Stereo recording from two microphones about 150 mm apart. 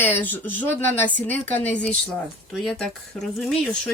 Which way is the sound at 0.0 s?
15° left (ahead or behind).